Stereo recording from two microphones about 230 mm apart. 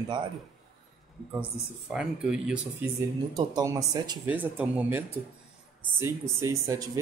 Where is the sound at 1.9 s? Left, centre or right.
Centre.